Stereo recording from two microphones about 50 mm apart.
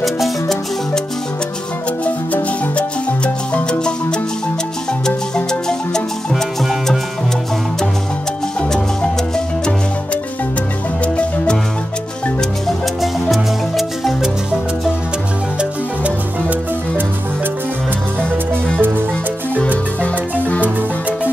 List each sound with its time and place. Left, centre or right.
0.0 s music: centre
3.5 s music: centre
8.5 s music: left
13.0 s music: centre
16.0 s music: right
18.8 s music: right
20.0 s music: left